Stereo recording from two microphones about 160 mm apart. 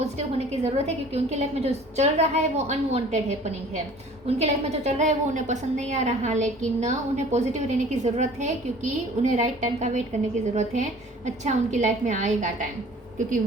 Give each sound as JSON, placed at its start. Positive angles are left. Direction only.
{"t": 0.0, "sound": "a woman's voice", "side_deg": -45}